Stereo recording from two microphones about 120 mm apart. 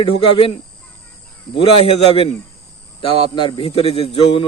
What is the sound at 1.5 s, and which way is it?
Speech, 55° left (ahead or behind).